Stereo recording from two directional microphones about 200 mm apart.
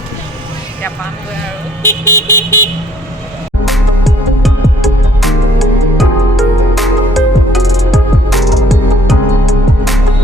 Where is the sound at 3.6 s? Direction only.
Centre (ahead or behind).